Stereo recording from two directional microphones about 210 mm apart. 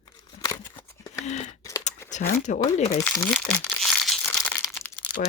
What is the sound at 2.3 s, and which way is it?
Speech, 40° left (ahead or behind).